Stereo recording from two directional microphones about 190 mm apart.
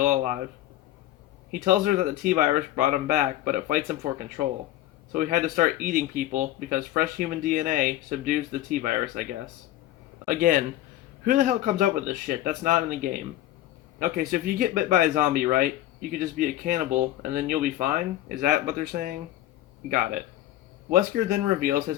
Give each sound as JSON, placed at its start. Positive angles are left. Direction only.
{"t": 0.0, "sound": "speech", "side_deg": -45}
{"t": 1.5, "sound": "speech", "side_deg": -45}
{"t": 5.1, "sound": "speech", "side_deg": -40}
{"t": 10.2, "sound": "speech", "side_deg": -45}